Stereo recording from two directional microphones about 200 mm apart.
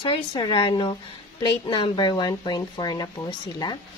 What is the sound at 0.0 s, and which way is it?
Speech, 20° left (ahead or behind).